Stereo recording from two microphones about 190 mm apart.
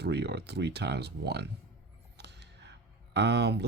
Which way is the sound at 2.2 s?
65° right (ahead or behind).